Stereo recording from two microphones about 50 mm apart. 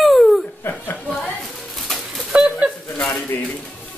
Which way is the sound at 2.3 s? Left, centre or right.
Right.